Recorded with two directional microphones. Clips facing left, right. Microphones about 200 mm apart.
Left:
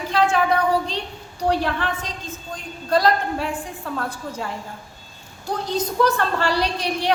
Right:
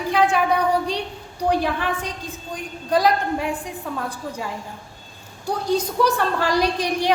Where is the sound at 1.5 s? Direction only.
10° right (ahead or behind).